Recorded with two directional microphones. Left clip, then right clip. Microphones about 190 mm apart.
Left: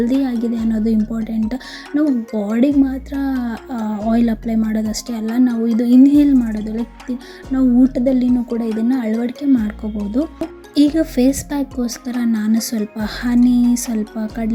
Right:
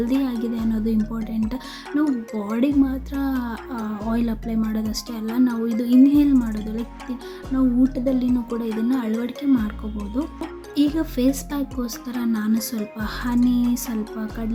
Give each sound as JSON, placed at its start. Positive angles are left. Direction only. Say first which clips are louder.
{"t": 0.0, "sound": "speech", "louder": "left 5 dB", "side_deg": 20}
{"t": 7.5, "sound": "speech", "louder": "left 6 dB", "side_deg": 20}